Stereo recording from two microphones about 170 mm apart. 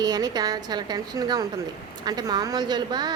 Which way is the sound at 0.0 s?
25° right (ahead or behind).